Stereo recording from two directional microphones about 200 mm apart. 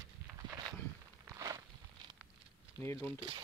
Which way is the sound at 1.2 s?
15° right (ahead or behind).